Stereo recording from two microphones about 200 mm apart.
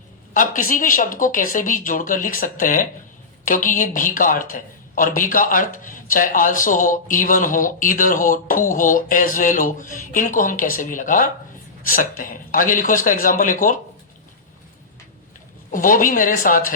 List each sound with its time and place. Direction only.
0.3 s speech: 40° left (ahead or behind)
15.7 s a woman's voice: 40° left (ahead or behind)